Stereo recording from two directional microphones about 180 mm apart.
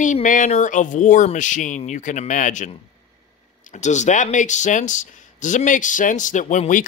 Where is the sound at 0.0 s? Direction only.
45° left (ahead or behind).